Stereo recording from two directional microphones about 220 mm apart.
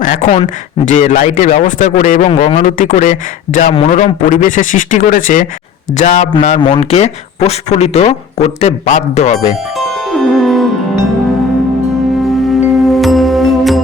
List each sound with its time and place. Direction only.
0.0 s speech: 35° left (ahead or behind)
2.3 s speech: 25° left (ahead or behind)
2.6 s speech: 40° left (ahead or behind)
9.7 s music: centre (ahead or behind)
12.7 s music: centre (ahead or behind)